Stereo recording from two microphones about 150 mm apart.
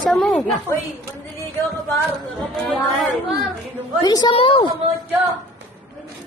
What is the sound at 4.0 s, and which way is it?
Speech, 25° left (ahead or behind).